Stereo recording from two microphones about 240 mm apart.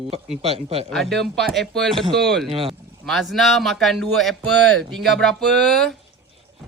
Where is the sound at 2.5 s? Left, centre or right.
Right.